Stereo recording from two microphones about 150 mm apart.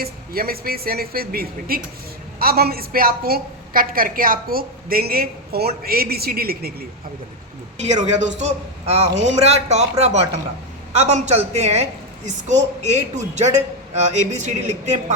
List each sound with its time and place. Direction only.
0.0 s a woman's voice: 85° right
7.8 s a woman's voice: 50° right (ahead or behind)